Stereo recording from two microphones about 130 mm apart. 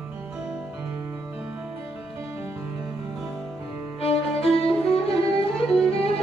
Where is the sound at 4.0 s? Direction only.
50° left (ahead or behind).